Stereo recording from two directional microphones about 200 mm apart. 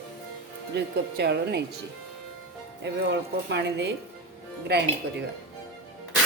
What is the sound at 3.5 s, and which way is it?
Speech, 60° right (ahead or behind).